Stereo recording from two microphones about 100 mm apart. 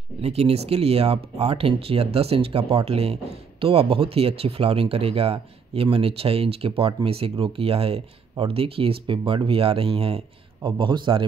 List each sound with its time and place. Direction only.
0.2 s speech: 85° right; by 11.2 s 55° right (ahead or behind)